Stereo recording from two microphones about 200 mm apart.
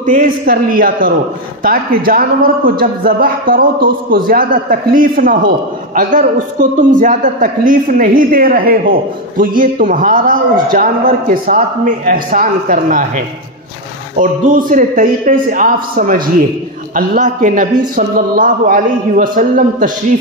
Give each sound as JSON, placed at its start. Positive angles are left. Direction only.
{"t": 0.0, "sound": "a man's voice", "side_deg": -45}
{"t": 14.1, "sound": "a man's voice", "side_deg": -40}